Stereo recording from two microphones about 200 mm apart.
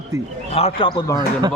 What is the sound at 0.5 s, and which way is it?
Speech, 30° left (ahead or behind).